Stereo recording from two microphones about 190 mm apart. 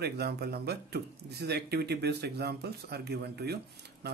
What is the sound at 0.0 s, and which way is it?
Speech, 55° right (ahead or behind).